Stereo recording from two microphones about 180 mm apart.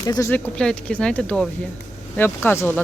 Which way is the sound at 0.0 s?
20° left (ahead or behind).